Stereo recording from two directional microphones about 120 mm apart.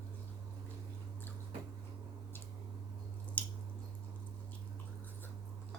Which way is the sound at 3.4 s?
10° left (ahead or behind).